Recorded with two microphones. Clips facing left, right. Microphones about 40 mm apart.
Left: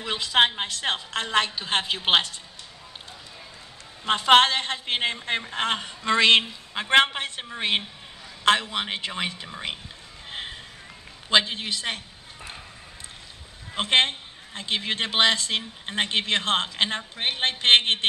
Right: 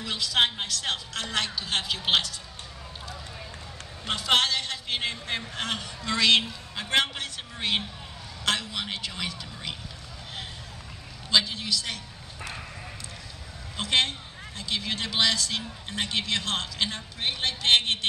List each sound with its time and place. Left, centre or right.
0.0 s a woman's voice: left
4.0 s a man's voice: left
11.2 s a man's voice: left
13.7 s a man's voice: left